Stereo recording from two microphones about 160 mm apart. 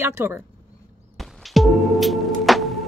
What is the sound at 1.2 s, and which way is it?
Music, centre (ahead or behind).